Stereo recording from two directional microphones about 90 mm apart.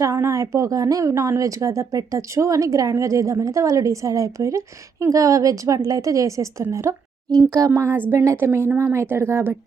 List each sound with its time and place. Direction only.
0.0 s speech: 35° right (ahead or behind)